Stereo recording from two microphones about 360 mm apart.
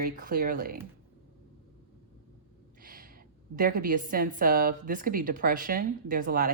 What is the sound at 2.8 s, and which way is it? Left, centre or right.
Gasp, right.